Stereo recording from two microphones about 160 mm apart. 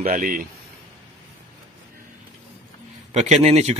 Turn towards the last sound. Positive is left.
turn(degrees=-45)  # may be behind; listen again after turning